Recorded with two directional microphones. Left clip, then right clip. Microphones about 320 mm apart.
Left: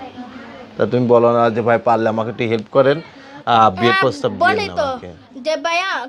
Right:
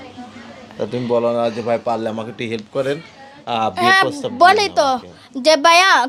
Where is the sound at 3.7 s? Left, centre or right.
Right.